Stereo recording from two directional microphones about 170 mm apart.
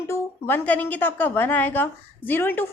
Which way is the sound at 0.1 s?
10° left (ahead or behind).